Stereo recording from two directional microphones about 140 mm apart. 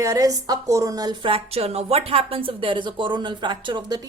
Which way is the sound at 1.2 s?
45° right (ahead or behind).